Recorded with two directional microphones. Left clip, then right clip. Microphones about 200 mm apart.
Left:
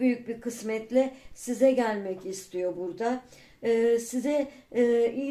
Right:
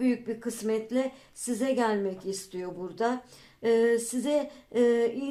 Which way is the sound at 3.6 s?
35° right (ahead or behind).